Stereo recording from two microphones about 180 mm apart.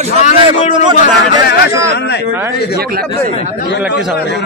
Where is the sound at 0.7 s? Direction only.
25° right (ahead or behind).